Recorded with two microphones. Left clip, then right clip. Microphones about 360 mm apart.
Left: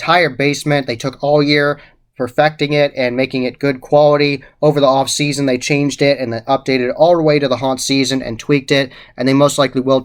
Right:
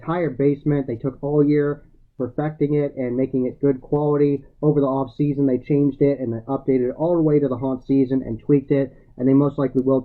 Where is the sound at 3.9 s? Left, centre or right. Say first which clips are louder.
Left 12 dB; left.